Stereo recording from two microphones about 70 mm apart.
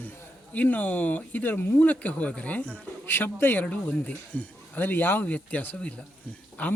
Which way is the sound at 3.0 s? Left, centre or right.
Left.